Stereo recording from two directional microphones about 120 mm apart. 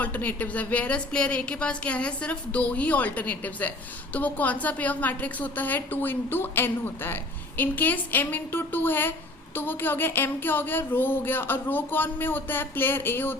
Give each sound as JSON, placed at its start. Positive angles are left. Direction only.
{"t": 0.0, "sound": "a woman's voice", "side_deg": 15}